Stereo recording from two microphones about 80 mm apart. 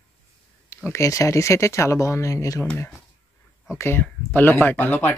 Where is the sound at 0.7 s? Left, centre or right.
Left.